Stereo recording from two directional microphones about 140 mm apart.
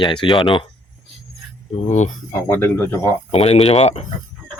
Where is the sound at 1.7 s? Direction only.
60° left (ahead or behind).